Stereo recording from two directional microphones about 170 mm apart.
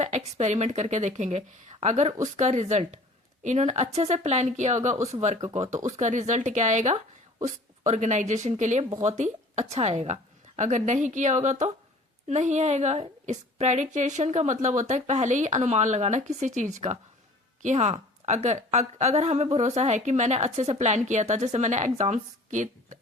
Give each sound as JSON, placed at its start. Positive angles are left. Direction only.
{"t": 0.3, "sound": "a woman's voice", "side_deg": -45}